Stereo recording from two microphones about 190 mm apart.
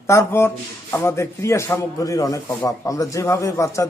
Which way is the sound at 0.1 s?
15° left (ahead or behind).